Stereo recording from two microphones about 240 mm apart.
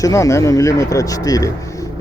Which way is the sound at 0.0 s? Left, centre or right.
Centre.